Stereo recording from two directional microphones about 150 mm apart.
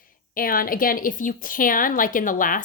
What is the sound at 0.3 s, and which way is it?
A woman's voice, 70° left (ahead or behind).